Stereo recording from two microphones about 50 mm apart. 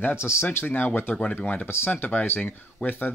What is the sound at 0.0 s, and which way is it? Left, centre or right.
Speech, left.